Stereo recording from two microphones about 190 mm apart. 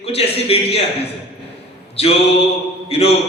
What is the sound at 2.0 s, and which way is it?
Speech, 30° left (ahead or behind).